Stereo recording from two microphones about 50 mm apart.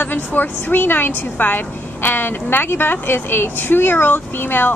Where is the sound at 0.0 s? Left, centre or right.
Left.